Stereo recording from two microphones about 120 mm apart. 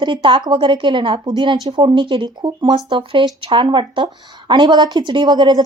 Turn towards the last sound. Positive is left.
turn(degrees=-35)  # may be behind; listen again after turning